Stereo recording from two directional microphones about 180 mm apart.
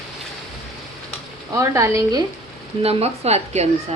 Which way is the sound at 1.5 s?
15° right (ahead or behind).